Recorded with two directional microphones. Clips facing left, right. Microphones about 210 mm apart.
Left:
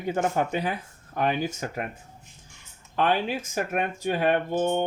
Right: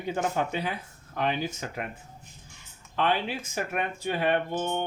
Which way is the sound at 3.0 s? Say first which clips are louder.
Left 3 dB; 45° left (ahead or behind).